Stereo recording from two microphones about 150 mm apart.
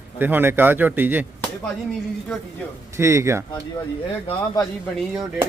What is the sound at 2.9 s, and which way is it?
Speech, 20° right (ahead or behind).